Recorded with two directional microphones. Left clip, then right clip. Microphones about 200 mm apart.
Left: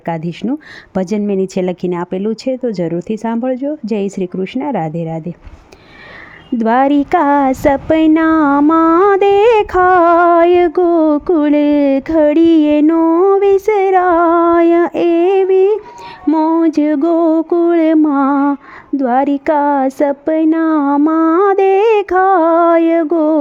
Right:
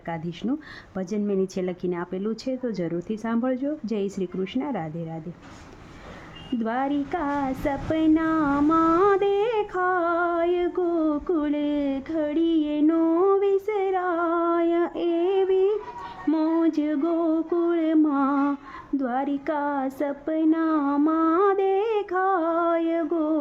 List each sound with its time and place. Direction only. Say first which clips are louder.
0.0 s speech: left 11 dB; 35° left (ahead or behind)
6.6 s speech: left 15 dB; 40° left (ahead or behind)